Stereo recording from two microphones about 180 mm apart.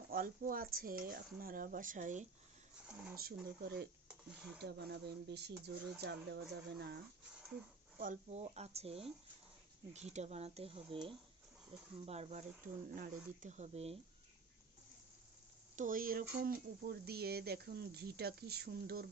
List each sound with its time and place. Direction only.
0.1 s speech: 50° right (ahead or behind)
3.2 s speech: 55° right (ahead or behind)
4.1 s speech: 5° right (ahead or behind)
4.6 s speech: 65° right (ahead or behind)
7.9 s speech: 45° right (ahead or behind)
15.7 s speech: 45° right (ahead or behind)